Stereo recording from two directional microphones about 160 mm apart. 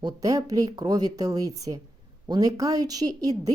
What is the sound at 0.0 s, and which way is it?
Speech, 20° right (ahead or behind).